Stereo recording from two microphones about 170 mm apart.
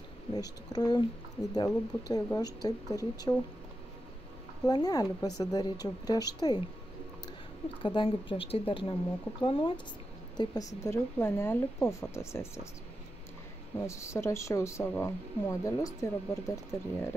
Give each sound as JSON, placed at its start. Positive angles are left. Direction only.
{"t": 0.3, "sound": "speech", "side_deg": 20}
{"t": 4.6, "sound": "speech", "side_deg": 25}
{"t": 7.8, "sound": "speech", "side_deg": 30}
{"t": 13.8, "sound": "speech", "side_deg": 15}